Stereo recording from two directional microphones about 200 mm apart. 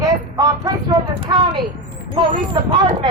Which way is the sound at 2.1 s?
25° right (ahead or behind).